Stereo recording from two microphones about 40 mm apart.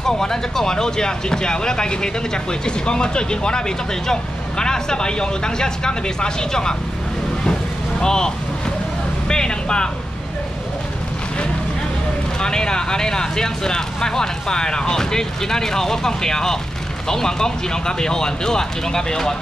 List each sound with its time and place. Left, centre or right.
0.0 s speech: centre
8.0 s speech: centre
9.3 s speech: centre
12.4 s speech: centre